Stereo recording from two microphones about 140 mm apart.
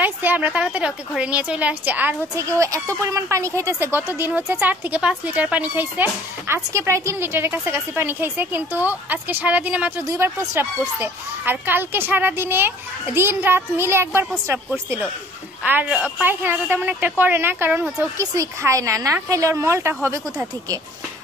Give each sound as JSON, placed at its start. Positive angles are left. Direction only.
{"t": 0.0, "sound": "speech", "side_deg": -15}
{"t": 2.6, "sound": "speech", "side_deg": -25}
{"t": 15.6, "sound": "speech", "side_deg": -10}